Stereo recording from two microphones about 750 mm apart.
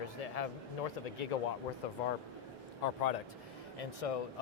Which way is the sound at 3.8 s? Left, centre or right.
Left.